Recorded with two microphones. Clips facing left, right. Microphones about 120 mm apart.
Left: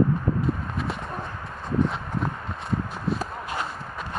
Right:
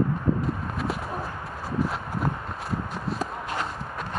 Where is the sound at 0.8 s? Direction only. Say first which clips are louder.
Right 1 dB; 5° right (ahead or behind).